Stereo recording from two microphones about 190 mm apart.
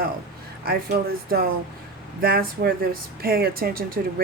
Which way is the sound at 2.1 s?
55° right (ahead or behind).